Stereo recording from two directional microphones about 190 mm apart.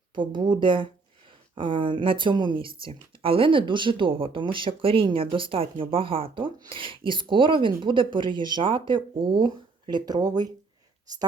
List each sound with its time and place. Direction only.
0.1 s speech: 25° right (ahead or behind)